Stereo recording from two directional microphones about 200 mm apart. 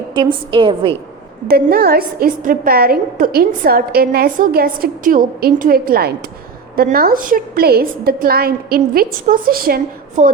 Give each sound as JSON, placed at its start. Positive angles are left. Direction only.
{"t": 0.1, "sound": "a woman's voice", "side_deg": -25}
{"t": 1.5, "sound": "a woman's voice", "side_deg": -50}